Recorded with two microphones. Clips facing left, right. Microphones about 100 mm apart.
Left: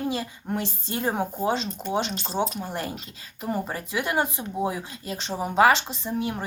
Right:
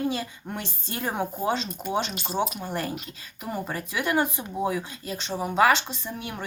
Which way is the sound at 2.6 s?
20° left (ahead or behind).